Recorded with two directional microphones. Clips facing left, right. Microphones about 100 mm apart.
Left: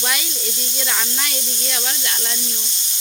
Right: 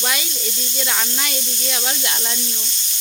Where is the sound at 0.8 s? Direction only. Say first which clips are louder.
Right 1 dB; 5° right (ahead or behind).